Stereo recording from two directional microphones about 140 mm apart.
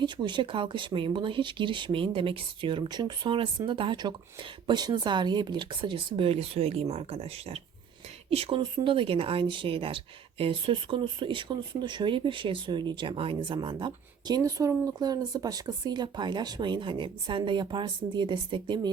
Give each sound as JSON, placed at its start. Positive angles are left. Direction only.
{"t": 0.0, "sound": "speech", "side_deg": -30}